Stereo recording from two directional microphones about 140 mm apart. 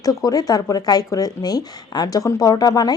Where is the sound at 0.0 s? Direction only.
25° left (ahead or behind).